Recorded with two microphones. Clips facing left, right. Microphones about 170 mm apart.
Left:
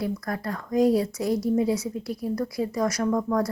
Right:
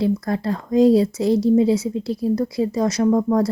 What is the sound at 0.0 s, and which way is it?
Speech, 25° right (ahead or behind).